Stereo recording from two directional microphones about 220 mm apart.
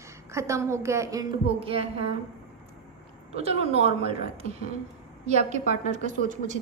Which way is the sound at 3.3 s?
30° right (ahead or behind).